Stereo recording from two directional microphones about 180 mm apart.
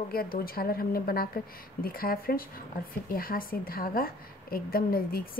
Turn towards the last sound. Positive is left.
turn(degrees=55)  # may be behind; listen again after turning